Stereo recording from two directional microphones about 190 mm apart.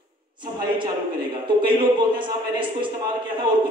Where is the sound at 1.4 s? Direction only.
25° right (ahead or behind).